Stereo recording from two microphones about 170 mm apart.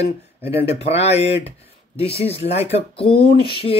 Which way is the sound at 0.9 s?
40° left (ahead or behind).